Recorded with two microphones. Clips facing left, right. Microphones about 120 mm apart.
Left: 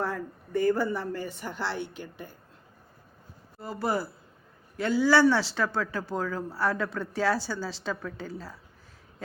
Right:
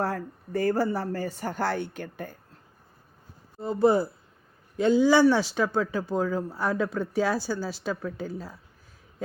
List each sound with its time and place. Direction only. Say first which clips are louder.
0.0 s speech: right 2 dB; 35° right (ahead or behind)
3.6 s speech: right 8 dB; 25° right (ahead or behind)